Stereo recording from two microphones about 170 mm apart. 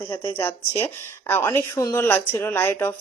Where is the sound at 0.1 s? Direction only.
15° left (ahead or behind).